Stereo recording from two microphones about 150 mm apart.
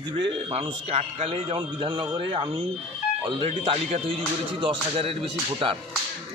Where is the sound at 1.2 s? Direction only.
35° right (ahead or behind).